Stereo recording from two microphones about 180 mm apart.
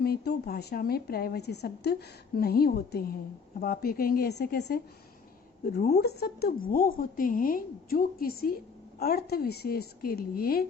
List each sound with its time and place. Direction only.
0.0 s a woman's voice: 60° left (ahead or behind)